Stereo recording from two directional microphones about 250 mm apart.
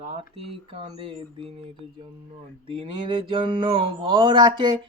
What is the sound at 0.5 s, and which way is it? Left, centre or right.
Speech, right.